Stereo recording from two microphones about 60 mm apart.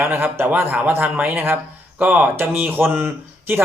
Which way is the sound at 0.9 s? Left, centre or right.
Right.